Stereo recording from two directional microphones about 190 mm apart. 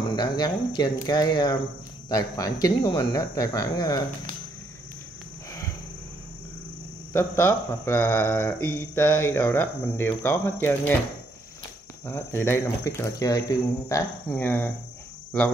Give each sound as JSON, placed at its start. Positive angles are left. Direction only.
{"t": 0.1, "sound": "speech", "side_deg": 20}
{"t": 7.1, "sound": "speech", "side_deg": 15}
{"t": 12.1, "sound": "speech", "side_deg": 10}